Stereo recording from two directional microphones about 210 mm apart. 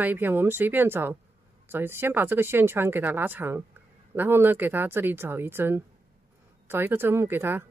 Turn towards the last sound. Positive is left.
turn(degrees=-10)  # may be behind; listen again after turning